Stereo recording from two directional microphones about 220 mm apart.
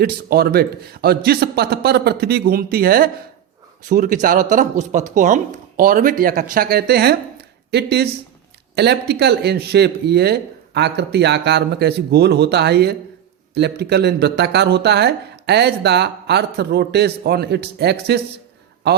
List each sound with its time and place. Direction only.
0.0 s speech: 45° right (ahead or behind)